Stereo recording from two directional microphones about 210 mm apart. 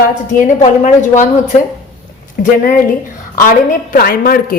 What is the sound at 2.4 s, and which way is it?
A woman's voice, 40° left (ahead or behind).